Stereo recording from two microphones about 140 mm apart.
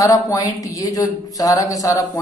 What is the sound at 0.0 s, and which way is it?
Speech, 25° left (ahead or behind).